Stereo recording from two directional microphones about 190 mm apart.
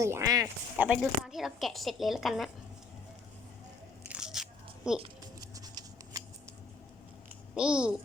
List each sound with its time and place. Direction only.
0.0 s a man's voice: 15° right (ahead or behind)
0.8 s speech: 5° right (ahead or behind)
4.1 s biting: 5° right (ahead or behind)
4.9 s speech: 5° right (ahead or behind)
5.4 s scissors: 20° right (ahead or behind)
7.5 s speech: 5° right (ahead or behind)